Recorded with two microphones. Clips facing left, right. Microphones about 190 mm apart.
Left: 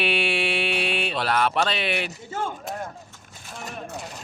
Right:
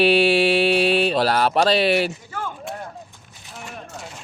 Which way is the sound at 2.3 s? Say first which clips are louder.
Left 2 dB; 25° left (ahead or behind).